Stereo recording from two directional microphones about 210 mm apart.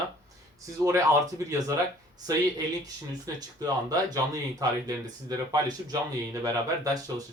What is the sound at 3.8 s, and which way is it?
Speech, 15° right (ahead or behind).